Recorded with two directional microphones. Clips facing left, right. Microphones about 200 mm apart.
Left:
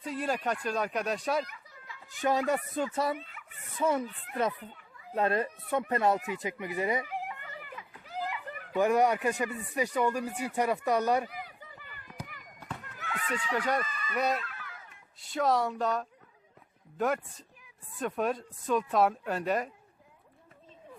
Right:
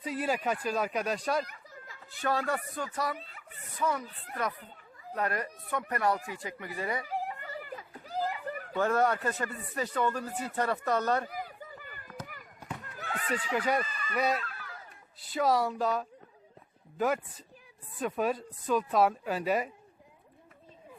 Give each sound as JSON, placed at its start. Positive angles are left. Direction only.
{"t": 0.0, "sound": "speech", "side_deg": -5}
{"t": 1.5, "sound": "children playing", "side_deg": -45}
{"t": 2.0, "sound": "speech", "side_deg": 15}
{"t": 3.2, "sound": "speech", "side_deg": -35}
{"t": 3.8, "sound": "speech", "side_deg": 25}
{"t": 5.1, "sound": "speech", "side_deg": 25}
{"t": 7.0, "sound": "children playing", "side_deg": -35}
{"t": 8.7, "sound": "speech", "side_deg": 15}
{"t": 11.3, "sound": "a sound", "side_deg": -45}
{"t": 14.1, "sound": "speech", "side_deg": 0}
{"t": 14.4, "sound": "a sound", "side_deg": -35}
{"t": 15.2, "sound": "speech", "side_deg": 0}
{"t": 18.0, "sound": "speech", "side_deg": 0}